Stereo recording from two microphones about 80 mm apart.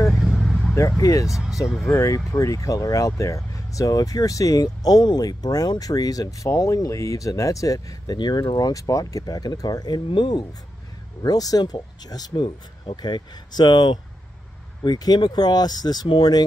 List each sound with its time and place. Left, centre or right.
0.2 s vehicle: centre
0.7 s speech: left
1.3 s speech: centre
1.9 s speech: left
8.2 s speech: left
14.8 s speech: left